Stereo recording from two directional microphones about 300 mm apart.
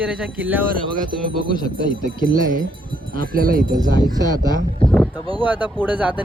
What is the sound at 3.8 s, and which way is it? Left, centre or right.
Speech, centre.